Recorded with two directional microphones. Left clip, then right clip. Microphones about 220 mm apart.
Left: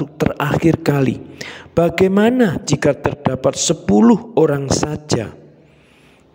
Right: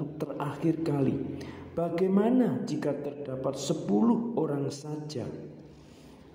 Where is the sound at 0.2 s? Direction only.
50° left (ahead or behind).